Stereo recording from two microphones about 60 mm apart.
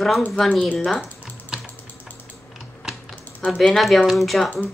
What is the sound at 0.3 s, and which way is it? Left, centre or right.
Speech, centre.